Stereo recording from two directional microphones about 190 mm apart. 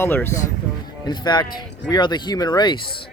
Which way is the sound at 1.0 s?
20° left (ahead or behind).